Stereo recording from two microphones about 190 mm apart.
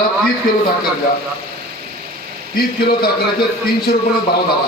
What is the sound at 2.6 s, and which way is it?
Speech, 55° left (ahead or behind).